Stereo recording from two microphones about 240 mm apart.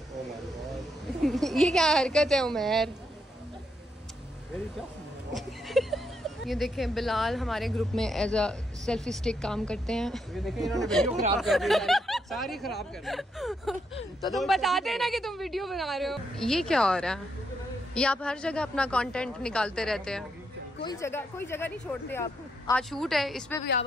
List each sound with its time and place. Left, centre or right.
1.2 s speech: centre
5.3 s a sound: centre
6.4 s speech: centre
11.1 s speech: right
11.3 s speech: centre
20.8 s speech: centre